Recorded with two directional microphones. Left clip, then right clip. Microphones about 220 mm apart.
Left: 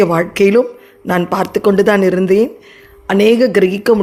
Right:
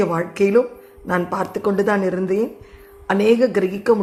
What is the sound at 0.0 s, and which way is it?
Speech, 40° left (ahead or behind).